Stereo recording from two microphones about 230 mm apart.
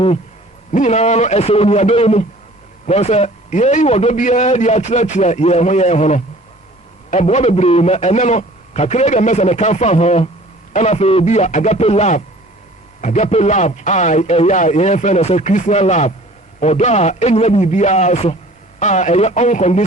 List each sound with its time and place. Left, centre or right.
0.7 s a man's voice: left